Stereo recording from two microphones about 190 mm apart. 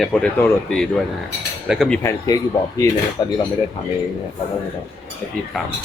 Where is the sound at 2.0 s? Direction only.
15° left (ahead or behind).